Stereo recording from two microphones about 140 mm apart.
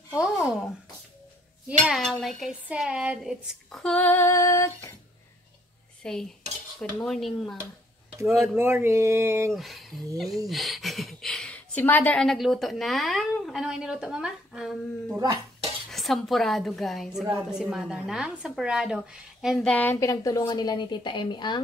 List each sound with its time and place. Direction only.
0.1 s a woman's voice: 5° right (ahead or behind)
1.7 s a woman's voice: centre (ahead or behind); by 4.9 s 20° left (ahead or behind)
6.0 s a woman's voice: 5° left (ahead or behind)
8.5 s a sound: 15° right (ahead or behind)
9.5 s a woman's voice: centre (ahead or behind); by 21.5 s 35° left (ahead or behind)